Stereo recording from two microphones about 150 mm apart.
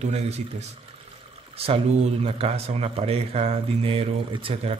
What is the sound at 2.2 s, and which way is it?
Speech, 40° right (ahead or behind).